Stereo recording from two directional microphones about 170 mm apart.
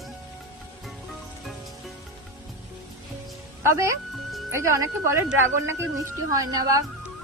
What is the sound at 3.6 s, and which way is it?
A woman's voice, 15° right (ahead or behind).